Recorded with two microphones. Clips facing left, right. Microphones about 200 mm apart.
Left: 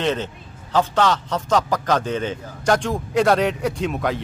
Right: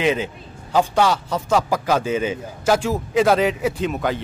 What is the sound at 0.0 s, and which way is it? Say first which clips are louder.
A man's voice: right 2 dB; 10° right (ahead or behind).